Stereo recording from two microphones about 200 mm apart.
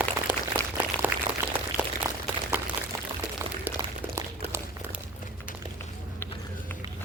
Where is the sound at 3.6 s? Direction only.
10° right (ahead or behind).